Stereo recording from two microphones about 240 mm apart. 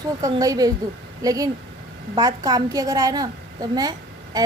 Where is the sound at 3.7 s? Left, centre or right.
Centre.